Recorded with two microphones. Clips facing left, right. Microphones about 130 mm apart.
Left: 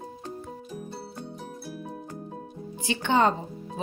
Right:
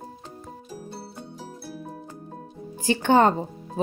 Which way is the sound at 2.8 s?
45° right (ahead or behind).